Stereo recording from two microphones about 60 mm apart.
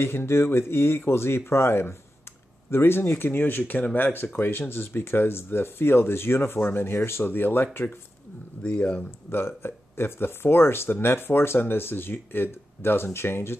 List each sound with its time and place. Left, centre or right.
0.0 s speech: left
8.6 s speech: left
9.3 s speech: left